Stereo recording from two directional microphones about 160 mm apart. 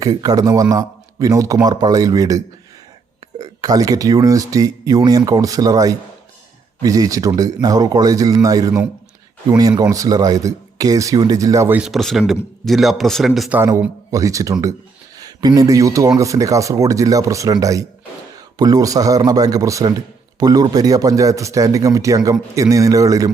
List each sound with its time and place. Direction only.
0.0 s a man's voice: 25° right (ahead or behind)
11.8 s a man's voice: centre (ahead or behind)
13.6 s a man's voice: 20° right (ahead or behind)